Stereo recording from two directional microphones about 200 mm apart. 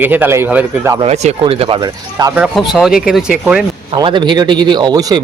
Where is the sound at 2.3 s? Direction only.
Centre (ahead or behind).